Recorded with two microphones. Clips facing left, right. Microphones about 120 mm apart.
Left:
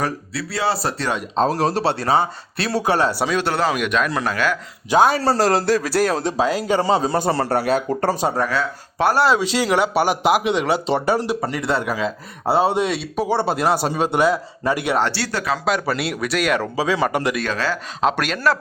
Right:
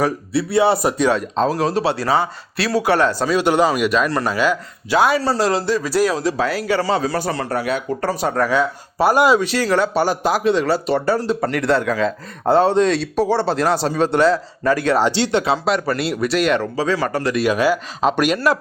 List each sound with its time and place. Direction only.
0.3 s speech: 25° right (ahead or behind)
1.6 s a man's voice: 30° left (ahead or behind)
3.2 s speech: 10° right (ahead or behind)
4.9 s a man's voice: 40° left (ahead or behind)
6.2 s a man's voice: 20° left (ahead or behind)
8.4 s speech: 10° right (ahead or behind)
9.4 s speech: 15° left (ahead or behind)
11.3 s speech: 5° left (ahead or behind)
14.9 s speech: 15° right (ahead or behind)
15.6 s speech: centre (ahead or behind)
16.7 s speech: 15° left (ahead or behind)
17.3 s speech: 10° right (ahead or behind)